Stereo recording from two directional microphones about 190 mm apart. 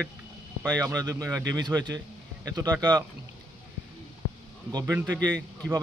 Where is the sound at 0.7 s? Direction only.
20° right (ahead or behind).